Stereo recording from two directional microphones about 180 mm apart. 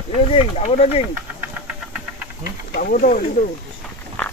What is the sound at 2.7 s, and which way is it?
Speech, 50° left (ahead or behind).